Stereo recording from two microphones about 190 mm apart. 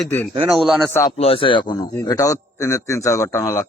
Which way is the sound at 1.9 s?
15° left (ahead or behind).